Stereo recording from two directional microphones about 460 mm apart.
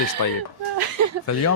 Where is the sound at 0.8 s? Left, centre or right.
Right.